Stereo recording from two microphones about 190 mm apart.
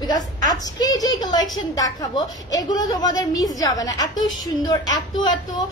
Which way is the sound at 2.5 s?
20° left (ahead or behind).